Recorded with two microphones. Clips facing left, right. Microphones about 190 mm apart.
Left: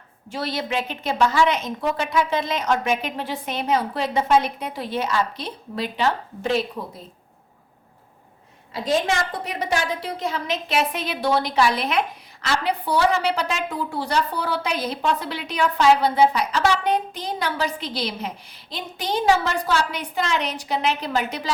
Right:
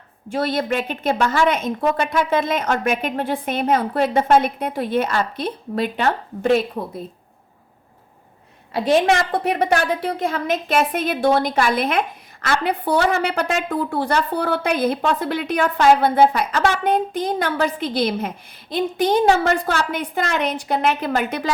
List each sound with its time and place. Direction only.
0.3 s a woman's voice: 50° right (ahead or behind)
8.7 s a woman's voice: 65° right (ahead or behind)